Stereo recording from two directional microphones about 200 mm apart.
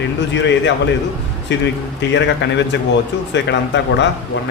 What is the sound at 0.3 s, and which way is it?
Speech, 60° left (ahead or behind).